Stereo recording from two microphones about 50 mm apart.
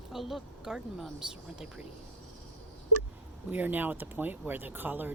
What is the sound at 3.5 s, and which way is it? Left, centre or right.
Speech, right.